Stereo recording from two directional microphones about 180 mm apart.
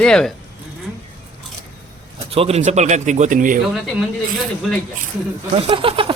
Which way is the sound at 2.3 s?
35° right (ahead or behind).